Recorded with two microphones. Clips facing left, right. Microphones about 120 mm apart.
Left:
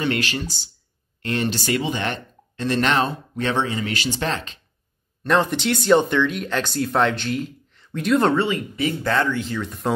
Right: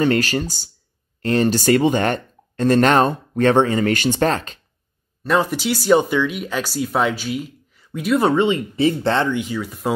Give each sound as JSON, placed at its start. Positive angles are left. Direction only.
{"t": 0.0, "sound": "speech", "side_deg": -40}
{"t": 5.2, "sound": "speech", "side_deg": -5}
{"t": 8.5, "sound": "speech", "side_deg": -25}